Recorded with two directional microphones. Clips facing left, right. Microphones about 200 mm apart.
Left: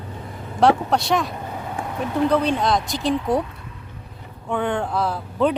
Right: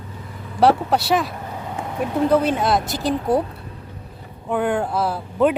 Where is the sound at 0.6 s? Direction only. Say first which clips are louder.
Right 1 dB; 5° right (ahead or behind).